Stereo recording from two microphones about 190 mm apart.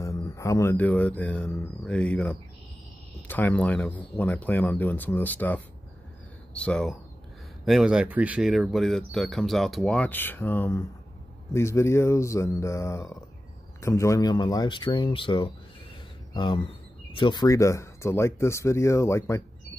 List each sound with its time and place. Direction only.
0.0 s speech: 15° left (ahead or behind)